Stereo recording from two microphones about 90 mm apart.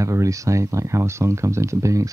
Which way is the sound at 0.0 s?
35° right (ahead or behind).